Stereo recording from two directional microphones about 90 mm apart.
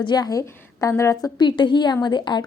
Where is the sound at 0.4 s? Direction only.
35° left (ahead or behind).